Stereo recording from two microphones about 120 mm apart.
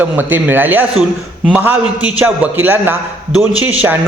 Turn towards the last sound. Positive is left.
turn(degrees=-15)  # may be behind; listen again after turning